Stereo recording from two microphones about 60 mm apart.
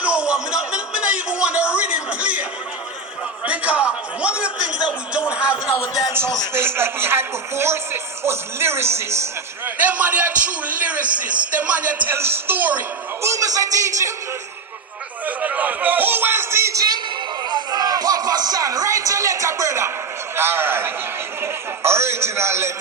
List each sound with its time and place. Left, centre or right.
0.0 s music: centre
1.7 s a sound: centre
5.9 s speech: left
6.5 s a man's voice: right
9.6 s a man's voice: right
12.1 s a man's voice: right
12.5 s a man's voice: right
13.2 s a man's voice: right
15.4 s speech: right
17.7 s speech: right
20.3 s a man's voice: right